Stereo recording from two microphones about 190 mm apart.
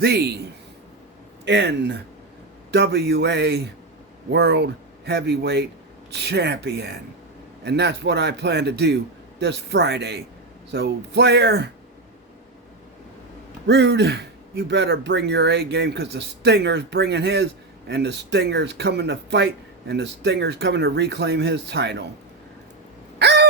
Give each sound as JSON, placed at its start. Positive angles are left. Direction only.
{"t": 0.0, "sound": "speech", "side_deg": -60}
{"t": 1.5, "sound": "speech", "side_deg": -65}
{"t": 13.7, "sound": "speech", "side_deg": -65}
{"t": 23.1, "sound": "a sound", "side_deg": -65}